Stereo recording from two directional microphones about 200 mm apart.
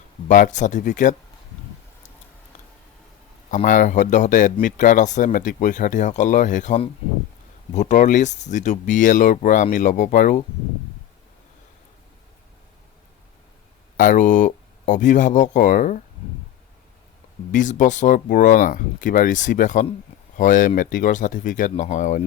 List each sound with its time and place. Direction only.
0.3 s speech: 40° left (ahead or behind)
3.5 s speech: 40° left (ahead or behind)
13.9 s speech: 40° left (ahead or behind)
17.5 s speech: 40° left (ahead or behind)